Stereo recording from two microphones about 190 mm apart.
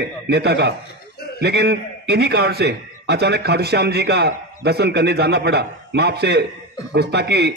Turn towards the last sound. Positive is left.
turn(degrees=-60)  # may be behind; listen again after turning